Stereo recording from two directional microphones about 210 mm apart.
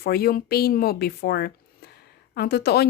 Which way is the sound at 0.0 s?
45° left (ahead or behind).